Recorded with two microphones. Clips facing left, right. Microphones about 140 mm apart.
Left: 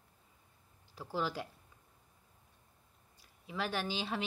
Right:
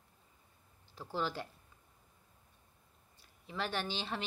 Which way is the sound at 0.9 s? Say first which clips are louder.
Left 1 dB; 5° left (ahead or behind).